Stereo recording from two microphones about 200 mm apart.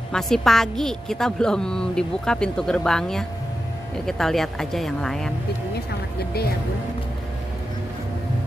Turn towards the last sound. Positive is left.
turn(degrees=55)  # may be behind; listen again after turning